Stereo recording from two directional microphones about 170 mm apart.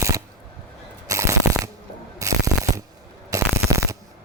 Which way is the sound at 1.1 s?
20° right (ahead or behind).